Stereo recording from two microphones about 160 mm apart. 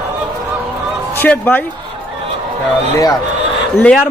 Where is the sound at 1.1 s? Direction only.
10° left (ahead or behind).